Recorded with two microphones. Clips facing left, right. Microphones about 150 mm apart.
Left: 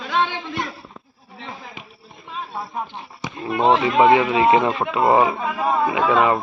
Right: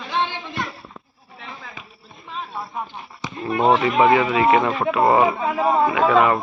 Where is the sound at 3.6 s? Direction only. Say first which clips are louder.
Left 1 dB; 30° left (ahead or behind).